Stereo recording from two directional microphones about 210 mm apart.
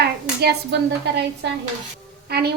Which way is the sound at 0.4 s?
55° right (ahead or behind).